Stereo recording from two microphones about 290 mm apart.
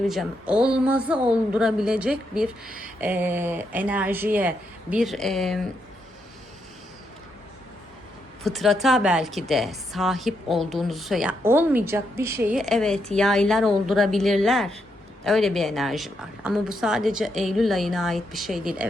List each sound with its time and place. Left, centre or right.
0.1 s a woman's voice: centre
8.4 s a woman's voice: centre